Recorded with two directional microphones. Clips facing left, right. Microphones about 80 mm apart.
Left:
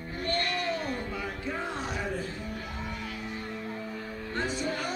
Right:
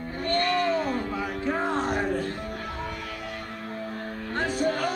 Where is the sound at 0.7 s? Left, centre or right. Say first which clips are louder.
Right 6 dB; right.